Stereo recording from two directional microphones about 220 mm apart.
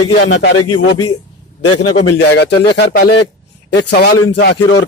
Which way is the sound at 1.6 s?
90° left.